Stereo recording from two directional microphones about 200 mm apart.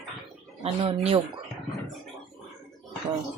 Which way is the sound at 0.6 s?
25° right (ahead or behind).